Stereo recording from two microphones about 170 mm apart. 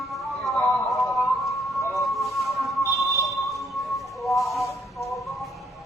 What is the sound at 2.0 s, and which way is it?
Music, centre (ahead or behind).